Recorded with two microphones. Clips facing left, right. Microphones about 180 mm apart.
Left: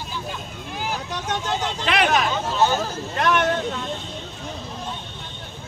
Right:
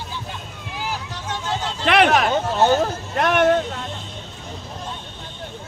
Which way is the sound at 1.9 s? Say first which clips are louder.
Right 5 dB; 60° right (ahead or behind).